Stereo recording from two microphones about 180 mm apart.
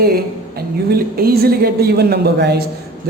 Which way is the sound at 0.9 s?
60° right (ahead or behind).